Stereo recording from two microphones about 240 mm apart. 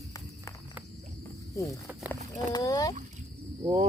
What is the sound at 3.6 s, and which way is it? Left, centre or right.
Speech, centre.